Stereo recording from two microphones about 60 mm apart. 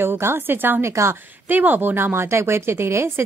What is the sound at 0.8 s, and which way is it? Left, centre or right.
Speech, right.